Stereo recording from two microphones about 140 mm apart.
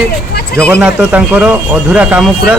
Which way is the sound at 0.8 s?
10° right (ahead or behind).